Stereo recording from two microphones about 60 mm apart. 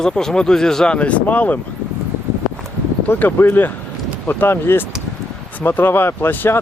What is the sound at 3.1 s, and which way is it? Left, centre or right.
Speech, left.